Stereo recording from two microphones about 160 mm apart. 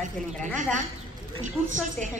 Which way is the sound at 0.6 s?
50° right (ahead or behind).